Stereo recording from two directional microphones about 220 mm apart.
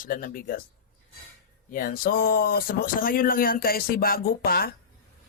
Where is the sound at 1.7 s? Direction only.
40° left (ahead or behind).